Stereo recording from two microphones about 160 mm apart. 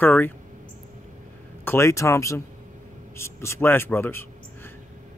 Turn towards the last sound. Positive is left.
turn(degrees=15)  # may be behind; listen again after turning